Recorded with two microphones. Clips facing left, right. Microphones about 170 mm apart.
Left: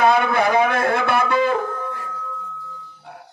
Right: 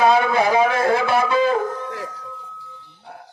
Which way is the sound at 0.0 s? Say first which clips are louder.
Right 1 dB; 55° left (ahead or behind).